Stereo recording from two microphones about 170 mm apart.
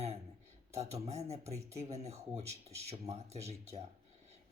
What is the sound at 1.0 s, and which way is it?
Speech, 40° right (ahead or behind).